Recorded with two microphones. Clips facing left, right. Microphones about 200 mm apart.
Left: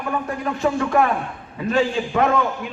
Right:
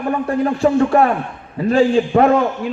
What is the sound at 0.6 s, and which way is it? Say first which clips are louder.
A man's voice: right 4 dB; 35° right (ahead or behind).